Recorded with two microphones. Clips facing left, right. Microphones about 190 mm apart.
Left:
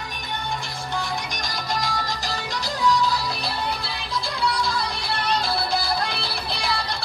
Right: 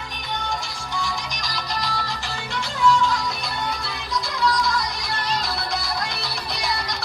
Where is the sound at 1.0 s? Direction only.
50° left (ahead or behind).